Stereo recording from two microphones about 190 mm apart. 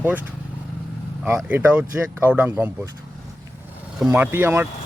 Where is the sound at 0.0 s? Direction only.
10° right (ahead or behind).